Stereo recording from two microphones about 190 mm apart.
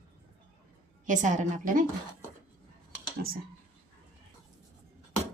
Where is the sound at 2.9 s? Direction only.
50° right (ahead or behind).